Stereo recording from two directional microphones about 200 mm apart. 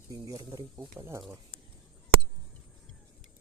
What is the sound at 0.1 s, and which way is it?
Speech, 15° right (ahead or behind).